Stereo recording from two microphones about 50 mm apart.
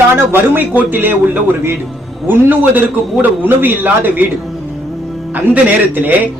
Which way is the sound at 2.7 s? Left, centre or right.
Right.